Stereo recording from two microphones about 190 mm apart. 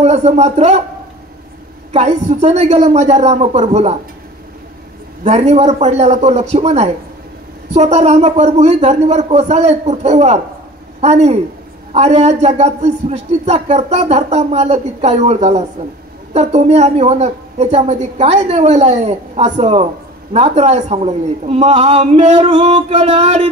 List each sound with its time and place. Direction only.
0.0 s a man's voice: 35° right (ahead or behind)
1.9 s a man's voice: 35° right (ahead or behind)
5.2 s a man's voice: 35° right (ahead or behind)